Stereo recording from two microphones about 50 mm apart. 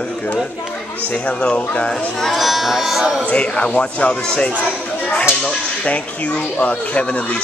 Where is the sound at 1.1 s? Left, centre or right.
Left.